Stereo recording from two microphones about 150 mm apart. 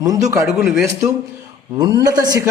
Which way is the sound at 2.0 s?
25° right (ahead or behind).